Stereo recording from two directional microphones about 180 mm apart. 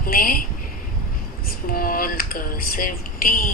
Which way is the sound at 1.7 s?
55° left (ahead or behind).